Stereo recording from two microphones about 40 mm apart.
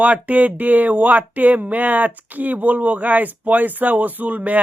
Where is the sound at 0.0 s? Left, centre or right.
Right.